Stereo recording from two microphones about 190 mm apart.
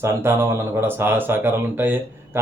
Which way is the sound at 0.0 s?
15° right (ahead or behind).